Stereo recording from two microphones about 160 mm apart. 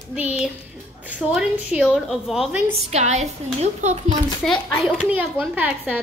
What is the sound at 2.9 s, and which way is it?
A child's voice, 45° right (ahead or behind).